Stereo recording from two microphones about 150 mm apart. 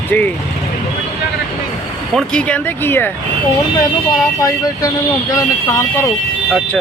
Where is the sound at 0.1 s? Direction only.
10° left (ahead or behind).